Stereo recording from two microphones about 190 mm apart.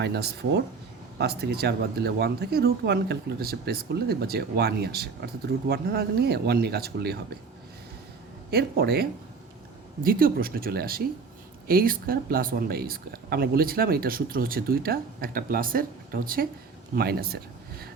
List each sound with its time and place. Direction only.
0.0 s speech: 60° right (ahead or behind)
8.4 s speech: 55° right (ahead or behind)